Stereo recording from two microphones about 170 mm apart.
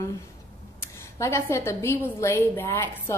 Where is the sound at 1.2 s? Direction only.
15° left (ahead or behind).